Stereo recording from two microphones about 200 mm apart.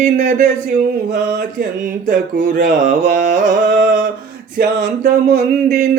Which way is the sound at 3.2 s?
40° right (ahead or behind).